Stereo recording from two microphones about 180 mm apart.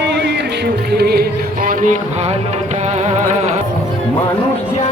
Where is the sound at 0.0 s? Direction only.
70° right (ahead or behind); by 3.5 s 40° right (ahead or behind).